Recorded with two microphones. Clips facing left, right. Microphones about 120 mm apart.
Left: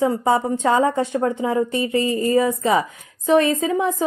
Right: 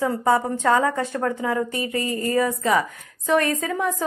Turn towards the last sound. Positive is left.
turn(degrees=20)  # may be behind; listen again after turning